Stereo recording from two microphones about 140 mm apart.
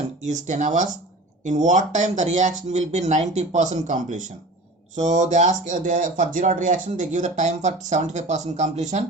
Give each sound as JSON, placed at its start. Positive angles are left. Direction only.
{"t": 0.2, "sound": "speech", "side_deg": -60}